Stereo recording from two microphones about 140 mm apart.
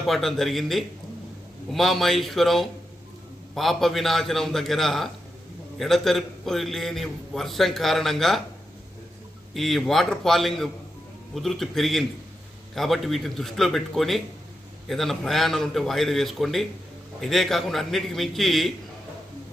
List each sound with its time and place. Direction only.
0.1 s a man's voice: centre (ahead or behind)
9.6 s a man's voice: centre (ahead or behind)